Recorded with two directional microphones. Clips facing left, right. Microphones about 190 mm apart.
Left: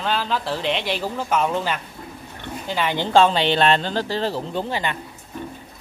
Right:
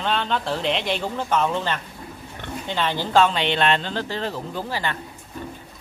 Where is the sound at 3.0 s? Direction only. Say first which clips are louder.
Left 3 dB; 30° left (ahead or behind).